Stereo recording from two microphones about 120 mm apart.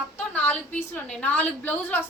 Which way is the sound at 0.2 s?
10° left (ahead or behind).